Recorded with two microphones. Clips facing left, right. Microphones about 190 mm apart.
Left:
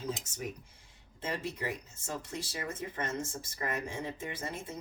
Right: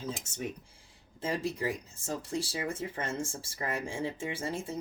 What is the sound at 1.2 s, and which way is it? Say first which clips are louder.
Speech: right 4 dB; 35° right (ahead or behind).